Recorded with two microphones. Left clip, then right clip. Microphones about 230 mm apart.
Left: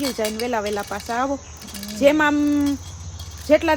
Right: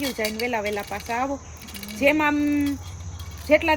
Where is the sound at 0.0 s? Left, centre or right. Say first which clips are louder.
Left 3 dB; left.